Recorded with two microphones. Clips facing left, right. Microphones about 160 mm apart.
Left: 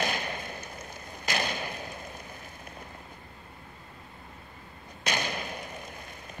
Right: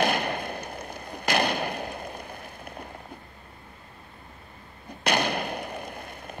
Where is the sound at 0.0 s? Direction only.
60° right (ahead or behind).